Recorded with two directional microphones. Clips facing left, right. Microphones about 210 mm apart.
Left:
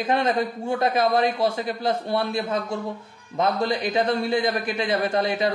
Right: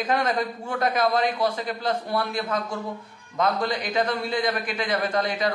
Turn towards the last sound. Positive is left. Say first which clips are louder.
# left 2 dB
turn(degrees=25)  # may be behind; listen again after turning